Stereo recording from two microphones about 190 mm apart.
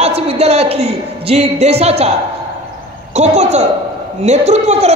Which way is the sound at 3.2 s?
35° right (ahead or behind).